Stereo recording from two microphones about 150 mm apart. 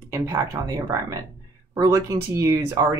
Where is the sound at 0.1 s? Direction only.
20° right (ahead or behind).